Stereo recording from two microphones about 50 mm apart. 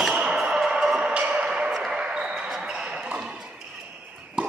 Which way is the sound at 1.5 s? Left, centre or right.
Centre.